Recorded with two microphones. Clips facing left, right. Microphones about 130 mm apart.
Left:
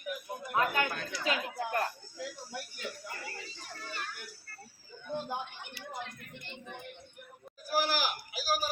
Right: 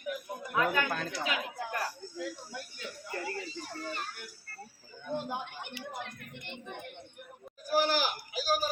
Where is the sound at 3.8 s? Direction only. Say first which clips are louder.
Right 4 dB; 35° right (ahead or behind).